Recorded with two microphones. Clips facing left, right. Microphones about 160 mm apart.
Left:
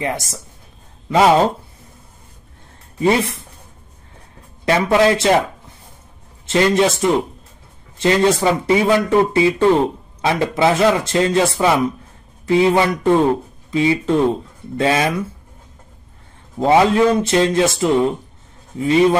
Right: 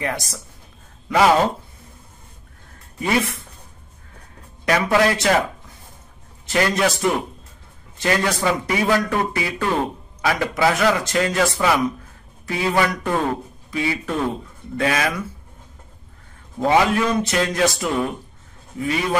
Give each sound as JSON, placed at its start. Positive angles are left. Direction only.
{"t": 0.0, "sound": "speech", "side_deg": 25}
{"t": 3.0, "sound": "speech", "side_deg": 30}
{"t": 4.6, "sound": "speech", "side_deg": 25}
{"t": 6.4, "sound": "speech", "side_deg": 25}
{"t": 16.5, "sound": "speech", "side_deg": 25}